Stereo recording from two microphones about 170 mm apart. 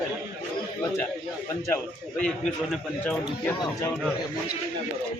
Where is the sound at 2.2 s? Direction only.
5° left (ahead or behind).